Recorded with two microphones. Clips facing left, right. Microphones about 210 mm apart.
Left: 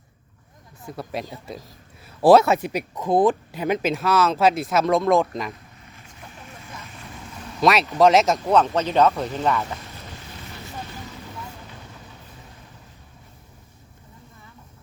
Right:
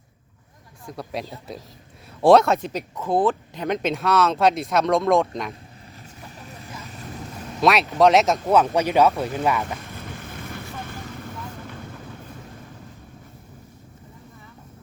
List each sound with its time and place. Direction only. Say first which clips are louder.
0.9 s speech: even; centre (ahead or behind)
7.6 s speech: even; centre (ahead or behind)
10.2 s vehicle: right 4 dB; 50° right (ahead or behind)